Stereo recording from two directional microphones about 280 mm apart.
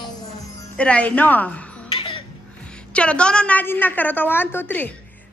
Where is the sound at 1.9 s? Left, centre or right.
Centre.